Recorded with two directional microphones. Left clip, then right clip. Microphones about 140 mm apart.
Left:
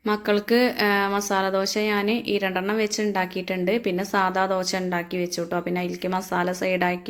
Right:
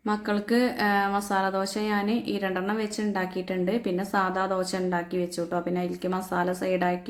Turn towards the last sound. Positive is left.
turn(degrees=15)  # may be behind; listen again after turning